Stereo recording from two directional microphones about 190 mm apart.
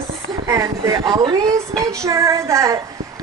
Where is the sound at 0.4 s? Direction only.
15° right (ahead or behind).